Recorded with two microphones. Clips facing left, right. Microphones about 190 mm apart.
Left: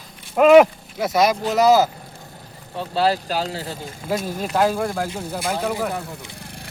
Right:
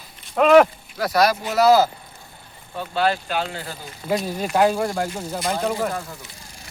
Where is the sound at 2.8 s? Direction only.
30° left (ahead or behind).